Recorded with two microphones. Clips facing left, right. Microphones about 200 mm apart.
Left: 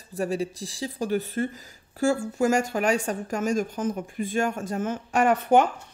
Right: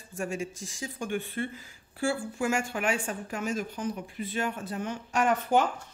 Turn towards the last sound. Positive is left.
turn(degrees=60)  # may be behind; listen again after turning